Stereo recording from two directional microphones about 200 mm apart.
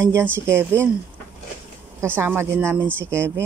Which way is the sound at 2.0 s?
10° right (ahead or behind).